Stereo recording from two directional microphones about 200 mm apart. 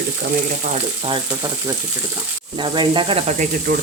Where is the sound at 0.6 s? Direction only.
35° right (ahead or behind).